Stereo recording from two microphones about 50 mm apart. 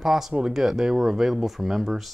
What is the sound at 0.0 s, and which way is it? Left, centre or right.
Speech, centre.